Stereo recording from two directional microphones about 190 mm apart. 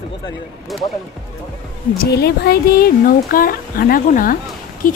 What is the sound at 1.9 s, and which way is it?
A woman's voice, 55° left (ahead or behind).